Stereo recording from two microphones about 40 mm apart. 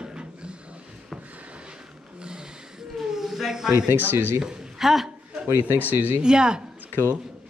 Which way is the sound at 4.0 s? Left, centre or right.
Right.